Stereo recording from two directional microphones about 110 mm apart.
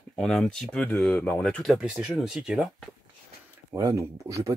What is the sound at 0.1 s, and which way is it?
Speech, 5° left (ahead or behind).